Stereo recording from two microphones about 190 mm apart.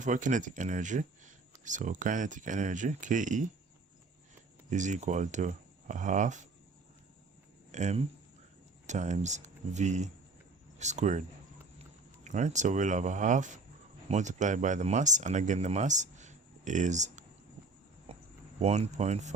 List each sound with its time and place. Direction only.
0.0 s speech: 40° right (ahead or behind)
4.7 s speech: 40° right (ahead or behind)
7.7 s speech: 40° right (ahead or behind)
12.2 s speech: 40° right (ahead or behind)
18.1 s a sound: 35° right (ahead or behind)
18.6 s speech: 35° right (ahead or behind)